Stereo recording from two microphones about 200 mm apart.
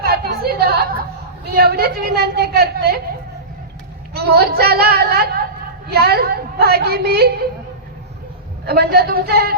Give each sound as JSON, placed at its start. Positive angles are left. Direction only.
{"t": 0.0, "sound": "chatter", "side_deg": -50}
{"t": 1.5, "sound": "a woman's voice", "side_deg": -50}
{"t": 4.1, "sound": "speech", "side_deg": -50}
{"t": 8.6, "sound": "speech", "side_deg": -50}